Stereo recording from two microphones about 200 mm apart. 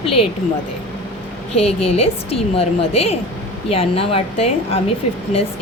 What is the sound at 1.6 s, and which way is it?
A woman's voice, 30° left (ahead or behind).